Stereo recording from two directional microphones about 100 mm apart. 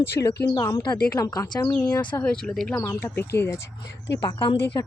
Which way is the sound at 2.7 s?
25° left (ahead or behind).